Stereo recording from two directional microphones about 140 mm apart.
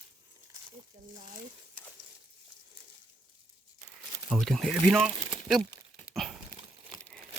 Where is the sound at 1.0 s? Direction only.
70° right (ahead or behind).